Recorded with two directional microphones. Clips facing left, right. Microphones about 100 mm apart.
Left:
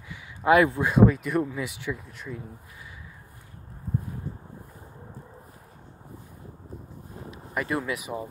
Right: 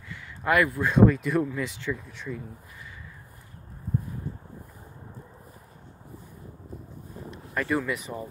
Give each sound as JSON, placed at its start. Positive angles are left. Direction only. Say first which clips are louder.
{"t": 0.1, "sound": "a sound", "louder": "left 5 dB", "side_deg": 15}
{"t": 0.8, "sound": "speech", "louder": "even", "side_deg": 5}
{"t": 7.2, "sound": "speech", "louder": "right 1 dB", "side_deg": 5}